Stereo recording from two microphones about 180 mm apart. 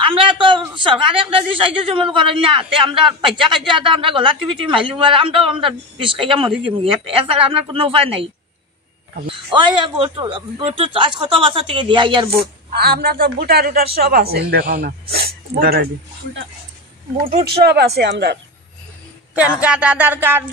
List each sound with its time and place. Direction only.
0.0 s a woman's voice: 30° right (ahead or behind)
9.5 s speech: 30° right (ahead or behind)
12.3 s speech: 60° right (ahead or behind)
14.7 s a woman's voice: 40° right (ahead or behind)
15.2 s speech: 55° right (ahead or behind)
17.6 s speech: 65° right (ahead or behind)
19.3 s speech: 5° right (ahead or behind)